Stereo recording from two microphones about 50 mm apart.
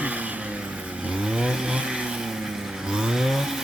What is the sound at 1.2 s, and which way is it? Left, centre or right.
Vehicle, centre.